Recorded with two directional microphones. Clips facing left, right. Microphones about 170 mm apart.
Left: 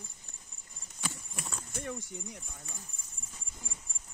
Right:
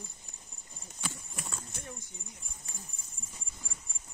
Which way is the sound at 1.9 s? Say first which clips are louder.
Left 7 dB; 75° left (ahead or behind).